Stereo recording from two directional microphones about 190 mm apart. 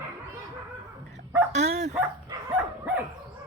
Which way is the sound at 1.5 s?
35° right (ahead or behind).